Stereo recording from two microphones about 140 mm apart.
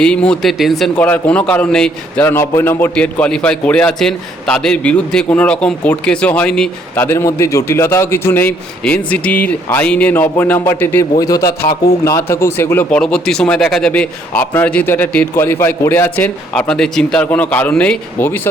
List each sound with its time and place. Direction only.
0.0 s speech: 5° left (ahead or behind)
11.2 s a man's voice: 25° left (ahead or behind); by 18.3 s 10° left (ahead or behind)